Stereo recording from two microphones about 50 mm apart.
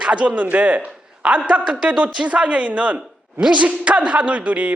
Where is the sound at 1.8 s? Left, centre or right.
Right.